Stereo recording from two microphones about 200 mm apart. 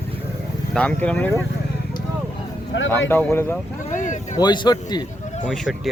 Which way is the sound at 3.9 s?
40° left (ahead or behind).